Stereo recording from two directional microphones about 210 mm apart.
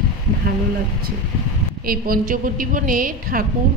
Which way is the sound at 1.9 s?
45° right (ahead or behind).